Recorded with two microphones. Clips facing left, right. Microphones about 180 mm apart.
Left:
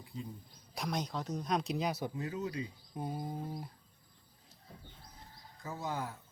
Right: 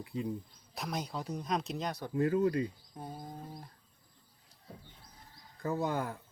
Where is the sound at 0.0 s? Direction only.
65° right (ahead or behind).